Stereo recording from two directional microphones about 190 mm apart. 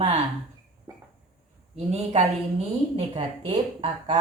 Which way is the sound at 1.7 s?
35° right (ahead or behind).